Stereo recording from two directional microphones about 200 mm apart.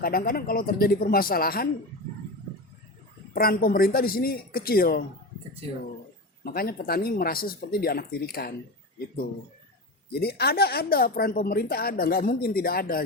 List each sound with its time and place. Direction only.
0.0 s speech: 50° left (ahead or behind)
3.3 s speech: 50° left (ahead or behind)
6.4 s speech: 50° left (ahead or behind)
10.1 s speech: 50° left (ahead or behind)